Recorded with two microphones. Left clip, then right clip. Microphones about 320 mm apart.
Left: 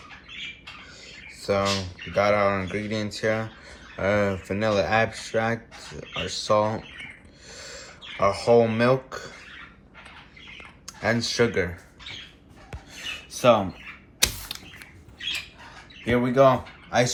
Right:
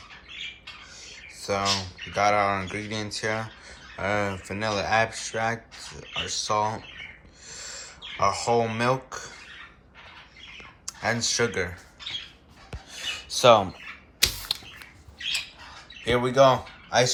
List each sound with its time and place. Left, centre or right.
1.5 s speech: centre
7.4 s a sound: centre
10.8 s speech: centre
12.9 s a sound: centre
14.5 s typing: centre
16.0 s speech: centre